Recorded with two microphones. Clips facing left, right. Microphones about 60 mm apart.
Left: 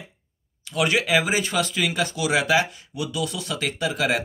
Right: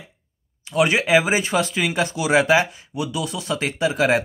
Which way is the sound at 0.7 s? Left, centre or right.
Right.